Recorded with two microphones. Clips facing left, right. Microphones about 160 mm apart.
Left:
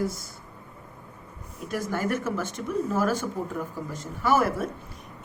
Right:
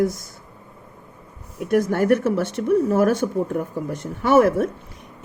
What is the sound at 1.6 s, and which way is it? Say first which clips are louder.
Speech: right 11 dB; 65° right (ahead or behind).